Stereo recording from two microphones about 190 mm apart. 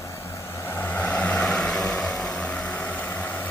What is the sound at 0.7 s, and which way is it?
Vehicle, 10° left (ahead or behind).